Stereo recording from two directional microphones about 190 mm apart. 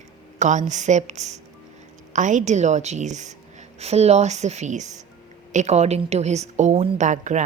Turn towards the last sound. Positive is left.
turn(degrees=-40)  # may be behind; listen again after turning